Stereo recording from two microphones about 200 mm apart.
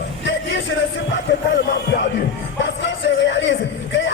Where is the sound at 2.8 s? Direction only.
65° left (ahead or behind).